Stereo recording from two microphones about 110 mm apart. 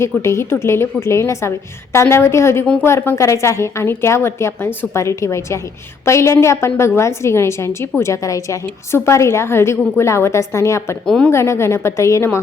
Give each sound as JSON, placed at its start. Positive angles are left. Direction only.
{"t": 0.0, "sound": "a woman's voice", "side_deg": 25}
{"t": 11.0, "sound": "a woman's voice", "side_deg": 5}
{"t": 11.3, "sound": "a woman's voice", "side_deg": 25}